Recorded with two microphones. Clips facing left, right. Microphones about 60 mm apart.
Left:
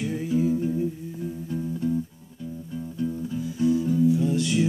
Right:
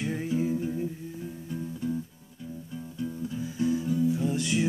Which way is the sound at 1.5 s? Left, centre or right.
Centre.